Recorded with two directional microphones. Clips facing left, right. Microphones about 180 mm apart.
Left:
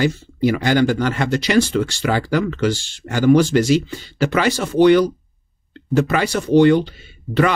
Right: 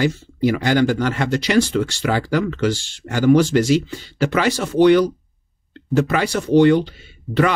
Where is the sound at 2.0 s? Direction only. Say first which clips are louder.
Left 1 dB; 20° left (ahead or behind).